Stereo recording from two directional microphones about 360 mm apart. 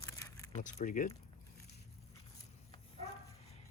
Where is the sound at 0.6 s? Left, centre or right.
Left.